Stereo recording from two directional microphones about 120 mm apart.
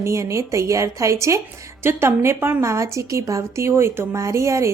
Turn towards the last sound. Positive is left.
turn(degrees=-25)  # may be behind; listen again after turning